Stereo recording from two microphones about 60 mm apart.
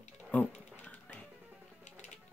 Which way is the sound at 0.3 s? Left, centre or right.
Left.